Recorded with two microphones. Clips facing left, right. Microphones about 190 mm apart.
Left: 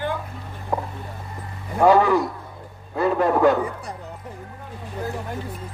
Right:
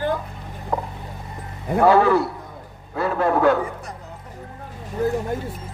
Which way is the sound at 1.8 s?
15° left (ahead or behind).